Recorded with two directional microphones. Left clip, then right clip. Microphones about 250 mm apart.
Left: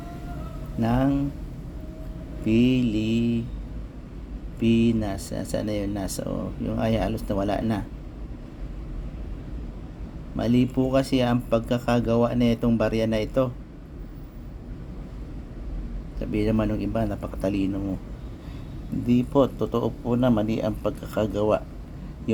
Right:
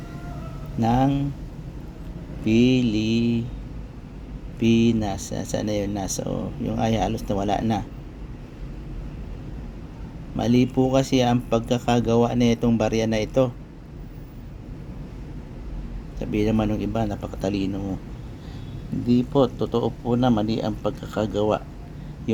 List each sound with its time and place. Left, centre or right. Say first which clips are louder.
0.8 s speech: right 3 dB; centre
2.4 s speech: right 2 dB; centre
4.6 s speech: right 2 dB; centre
10.3 s speech: right 3 dB; centre
16.1 s speech: right 2 dB; centre
19.0 s speech: right 1 dB; centre